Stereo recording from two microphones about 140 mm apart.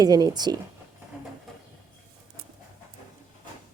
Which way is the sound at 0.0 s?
30° right (ahead or behind).